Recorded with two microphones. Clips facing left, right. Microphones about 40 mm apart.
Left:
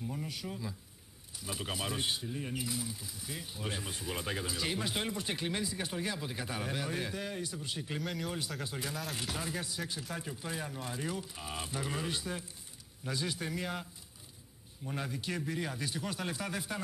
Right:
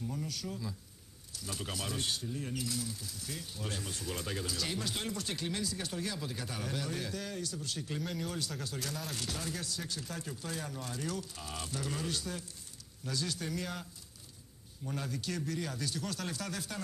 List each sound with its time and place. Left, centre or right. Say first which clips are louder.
0.0 s speech: even; centre
8.0 s speech: even; centre
8.3 s speech: left 1 dB; centre
14.9 s speech: left 1 dB; left